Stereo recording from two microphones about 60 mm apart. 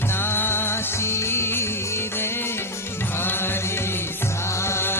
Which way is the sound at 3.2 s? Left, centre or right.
Left.